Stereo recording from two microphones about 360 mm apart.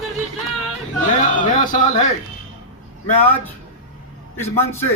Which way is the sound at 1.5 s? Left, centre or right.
Left.